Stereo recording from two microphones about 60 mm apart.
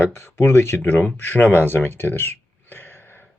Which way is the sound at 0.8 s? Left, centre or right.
Left.